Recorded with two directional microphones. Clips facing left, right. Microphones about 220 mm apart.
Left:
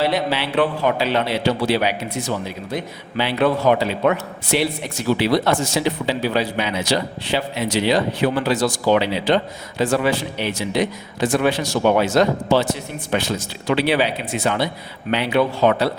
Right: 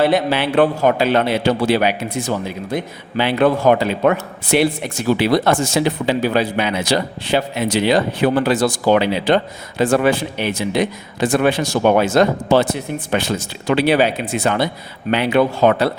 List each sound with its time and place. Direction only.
0.0 s speech: 50° right (ahead or behind)